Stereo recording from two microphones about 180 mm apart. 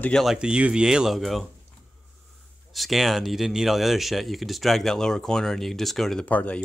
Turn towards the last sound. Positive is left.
turn(degrees=5)  # may be behind; listen again after turning